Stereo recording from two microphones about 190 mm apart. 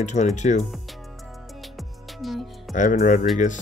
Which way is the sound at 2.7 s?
40° left (ahead or behind).